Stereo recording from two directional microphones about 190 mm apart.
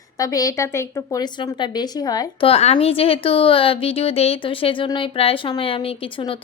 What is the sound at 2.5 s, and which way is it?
A woman's voice, 30° left (ahead or behind).